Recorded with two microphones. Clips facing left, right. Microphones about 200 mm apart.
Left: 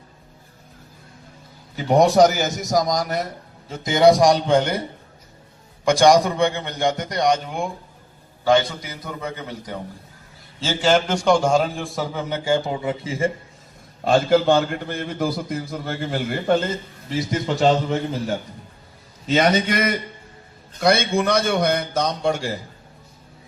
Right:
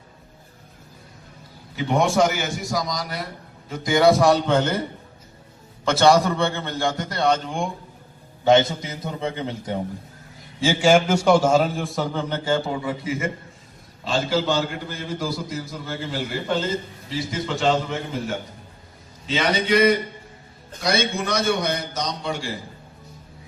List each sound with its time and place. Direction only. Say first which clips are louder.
1.7 s a man's voice: left 5 dB; 40° left (ahead or behind)
3.7 s a man's voice: left 2 dB; 20° left (ahead or behind)
8.4 s a man's voice: right 1 dB; 25° right (ahead or behind)
10.6 s a man's voice: right 2 dB; 10° right (ahead or behind); by 13.3 s 30° left (ahead or behind)
14.0 s a man's voice: left 6 dB; 55° left (ahead or behind)
17.6 s a man's voice: left 3 dB; 40° left (ahead or behind)